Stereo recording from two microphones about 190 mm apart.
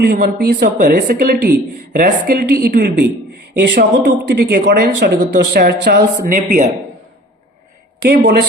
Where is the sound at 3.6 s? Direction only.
65° right (ahead or behind); by 6.6 s 45° right (ahead or behind).